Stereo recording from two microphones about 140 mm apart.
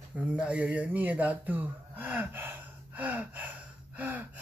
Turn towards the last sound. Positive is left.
turn(degrees=-10)  # may be behind; listen again after turning